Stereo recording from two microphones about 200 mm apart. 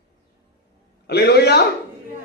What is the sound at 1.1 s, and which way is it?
Speech, 55° left (ahead or behind).